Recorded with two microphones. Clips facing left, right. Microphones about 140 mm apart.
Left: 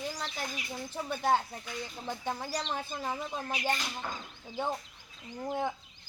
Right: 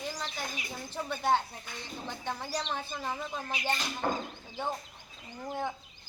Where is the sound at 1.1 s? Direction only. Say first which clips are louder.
Even; 5° left (ahead or behind).